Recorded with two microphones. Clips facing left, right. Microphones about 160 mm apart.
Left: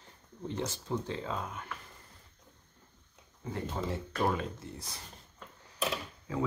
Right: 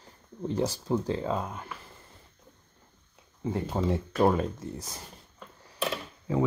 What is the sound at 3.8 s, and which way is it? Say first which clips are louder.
Speech: right 8 dB; 40° right (ahead or behind).